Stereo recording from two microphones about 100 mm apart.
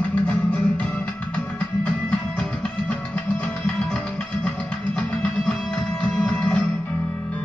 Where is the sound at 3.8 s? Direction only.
5° left (ahead or behind).